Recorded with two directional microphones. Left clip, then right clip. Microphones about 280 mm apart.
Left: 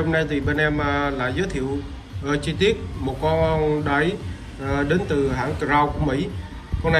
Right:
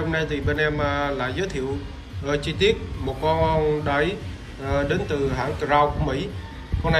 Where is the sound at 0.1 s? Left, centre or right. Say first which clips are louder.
Left 2 dB; centre.